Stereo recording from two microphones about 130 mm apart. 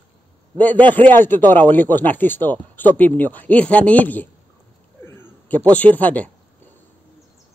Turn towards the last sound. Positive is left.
turn(degrees=10)  # may be behind; listen again after turning